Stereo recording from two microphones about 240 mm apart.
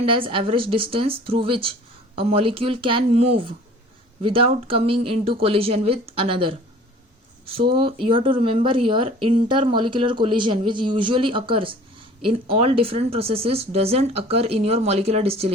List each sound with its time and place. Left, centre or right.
0.0 s speech: right